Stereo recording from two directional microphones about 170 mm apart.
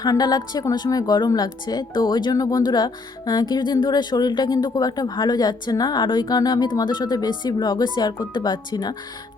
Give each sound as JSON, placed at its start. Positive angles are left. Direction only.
{"t": 0.0, "sound": "speech", "side_deg": 25}